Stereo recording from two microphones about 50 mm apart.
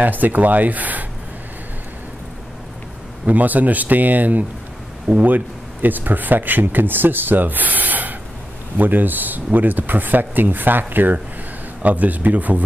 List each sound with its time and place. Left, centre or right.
0.0 s speech: right
3.3 s speech: right